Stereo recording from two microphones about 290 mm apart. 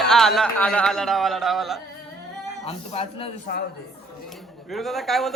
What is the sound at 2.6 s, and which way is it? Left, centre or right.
Speech, centre.